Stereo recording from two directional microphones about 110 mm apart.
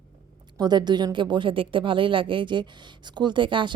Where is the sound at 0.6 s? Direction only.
40° right (ahead or behind).